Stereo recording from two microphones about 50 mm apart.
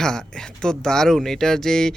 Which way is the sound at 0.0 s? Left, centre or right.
Centre.